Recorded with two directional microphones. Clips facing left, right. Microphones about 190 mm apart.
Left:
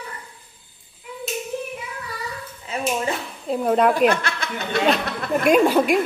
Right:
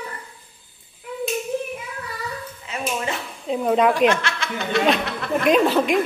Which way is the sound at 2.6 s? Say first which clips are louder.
Left 3 dB; 35° left (ahead or behind).